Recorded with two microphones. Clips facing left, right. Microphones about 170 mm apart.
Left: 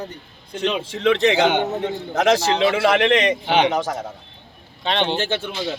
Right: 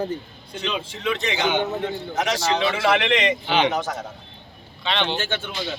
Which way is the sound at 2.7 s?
50° left (ahead or behind).